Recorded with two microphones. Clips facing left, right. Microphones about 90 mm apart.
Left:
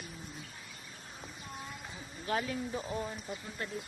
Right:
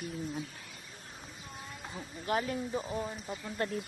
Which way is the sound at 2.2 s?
30° right (ahead or behind).